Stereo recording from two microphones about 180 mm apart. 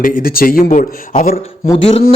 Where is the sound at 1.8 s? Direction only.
35° left (ahead or behind).